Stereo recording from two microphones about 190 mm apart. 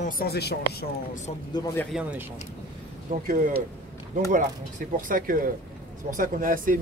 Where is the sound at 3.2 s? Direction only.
50° right (ahead or behind).